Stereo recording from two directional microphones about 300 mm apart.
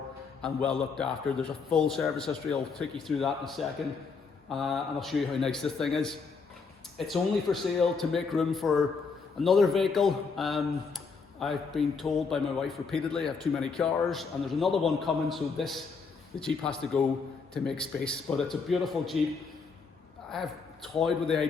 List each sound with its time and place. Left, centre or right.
0.4 s speech: centre
20.3 s speech: centre